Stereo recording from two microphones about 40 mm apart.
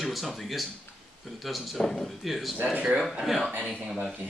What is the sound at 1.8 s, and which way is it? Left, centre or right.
Speech, centre.